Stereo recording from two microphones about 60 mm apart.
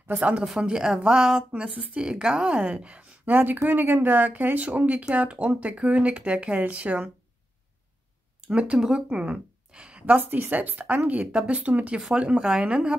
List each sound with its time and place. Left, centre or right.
0.4 s a woman's voice: centre
8.5 s speech: centre
8.8 s a woman's voice: centre
9.2 s a woman's voice: centre